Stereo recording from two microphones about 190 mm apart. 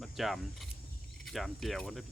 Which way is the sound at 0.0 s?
Centre (ahead or behind).